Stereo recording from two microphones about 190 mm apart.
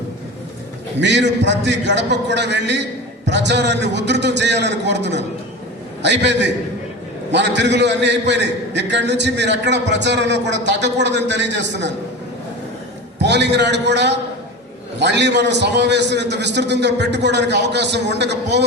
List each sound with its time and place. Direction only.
1.0 s a man's voice: 65° right (ahead or behind)
13.1 s a man's voice: 65° right (ahead or behind)